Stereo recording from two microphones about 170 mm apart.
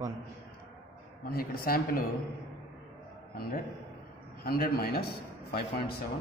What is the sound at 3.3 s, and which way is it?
A man's voice, 60° left (ahead or behind).